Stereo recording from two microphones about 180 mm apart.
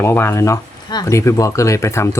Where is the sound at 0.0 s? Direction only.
15° left (ahead or behind).